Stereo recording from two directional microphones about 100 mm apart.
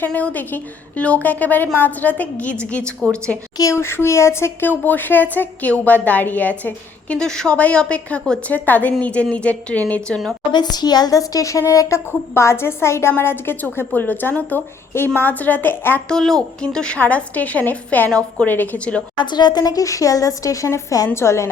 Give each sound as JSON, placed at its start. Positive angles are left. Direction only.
{"t": 0.0, "sound": "speech", "side_deg": 15}
{"t": 3.6, "sound": "speech", "side_deg": 30}
{"t": 10.5, "sound": "a woman's voice", "side_deg": 45}
{"t": 16.0, "sound": "speech", "side_deg": 5}
{"t": 19.1, "sound": "speech", "side_deg": 50}